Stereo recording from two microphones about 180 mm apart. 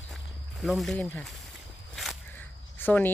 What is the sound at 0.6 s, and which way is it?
Speech, centre (ahead or behind).